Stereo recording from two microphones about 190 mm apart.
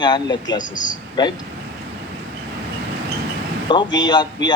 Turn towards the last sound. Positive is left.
turn(degrees=20)  # may be behind; listen again after turning